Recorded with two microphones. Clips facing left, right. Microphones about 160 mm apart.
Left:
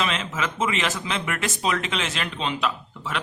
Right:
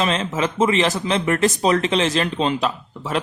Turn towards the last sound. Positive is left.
turn(degrees=-40)  # may be behind; listen again after turning